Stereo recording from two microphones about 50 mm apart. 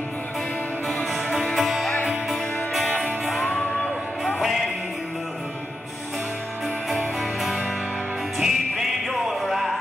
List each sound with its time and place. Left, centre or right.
1.5 s music: centre
3.5 s crowd: centre
4.4 s music: centre
6.9 s music: centre